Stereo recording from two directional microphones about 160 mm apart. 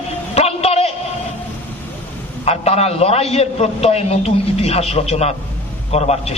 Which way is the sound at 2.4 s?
40° left (ahead or behind).